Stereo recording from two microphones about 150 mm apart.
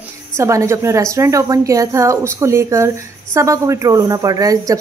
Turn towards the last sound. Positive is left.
turn(degrees=-25)  # may be behind; listen again after turning